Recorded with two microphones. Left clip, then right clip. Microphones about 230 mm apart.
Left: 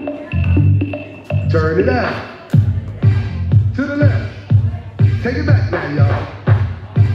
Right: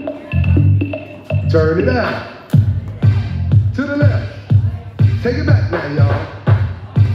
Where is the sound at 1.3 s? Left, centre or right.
Right.